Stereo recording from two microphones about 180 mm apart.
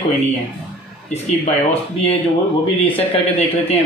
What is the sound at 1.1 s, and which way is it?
Speech, 35° left (ahead or behind).